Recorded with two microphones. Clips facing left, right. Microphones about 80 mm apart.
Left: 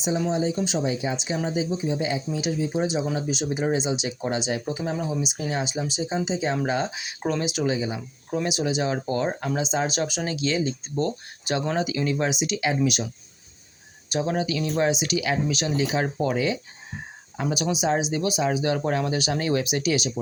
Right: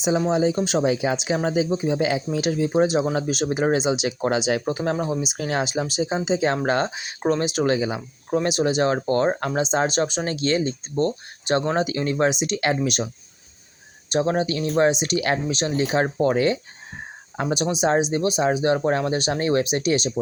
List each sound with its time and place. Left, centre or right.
0.3 s speech: right
5.3 s speech: right
6.9 s speech: right
7.7 s speech: right
8.3 s speech: right
14.1 s speech: right
15.4 s speech: right
15.7 s speech: right